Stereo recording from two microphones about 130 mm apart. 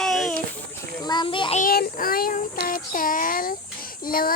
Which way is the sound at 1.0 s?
35° left (ahead or behind).